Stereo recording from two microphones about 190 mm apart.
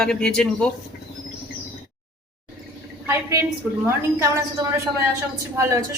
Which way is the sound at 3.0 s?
15° right (ahead or behind).